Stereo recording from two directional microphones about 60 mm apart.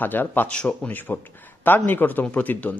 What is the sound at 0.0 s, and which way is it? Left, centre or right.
Speech, left.